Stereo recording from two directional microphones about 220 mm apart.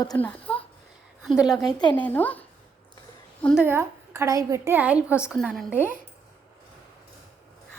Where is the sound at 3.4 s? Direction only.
5° right (ahead or behind).